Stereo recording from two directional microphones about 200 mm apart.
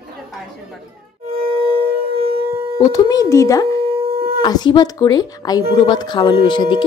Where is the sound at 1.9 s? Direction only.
50° right (ahead or behind).